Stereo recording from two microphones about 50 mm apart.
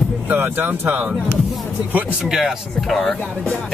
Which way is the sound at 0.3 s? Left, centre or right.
Right.